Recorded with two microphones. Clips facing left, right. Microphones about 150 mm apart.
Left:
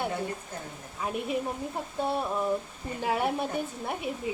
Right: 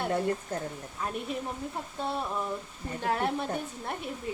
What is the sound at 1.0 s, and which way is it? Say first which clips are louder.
A woman's voice: left 4 dB; 5° left (ahead or behind).